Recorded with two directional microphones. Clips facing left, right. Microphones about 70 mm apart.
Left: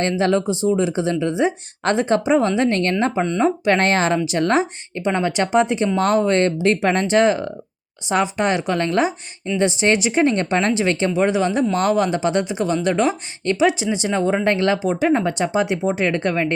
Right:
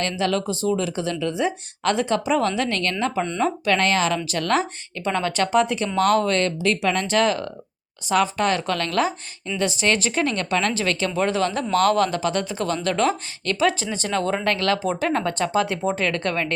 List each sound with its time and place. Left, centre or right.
0.0 s speech: left
14.8 s speech: centre